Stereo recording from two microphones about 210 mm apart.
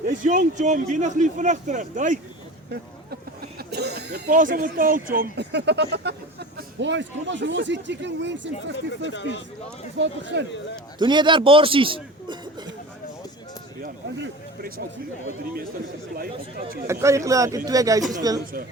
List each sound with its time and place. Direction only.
0.0 s a man's voice: 40° right (ahead or behind)
3.7 s speech: 50° right (ahead or behind)
9.1 s speech: 60° left (ahead or behind)
10.0 s speech: 60° right (ahead or behind)
11.0 s a man's voice: 20° right (ahead or behind)
14.2 s speech: 45° right (ahead or behind)
16.1 s speech: 45° right (ahead or behind)
16.8 s a man's voice: 15° right (ahead or behind)